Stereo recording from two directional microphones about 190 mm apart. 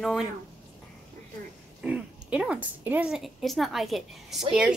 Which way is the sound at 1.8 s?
5° right (ahead or behind).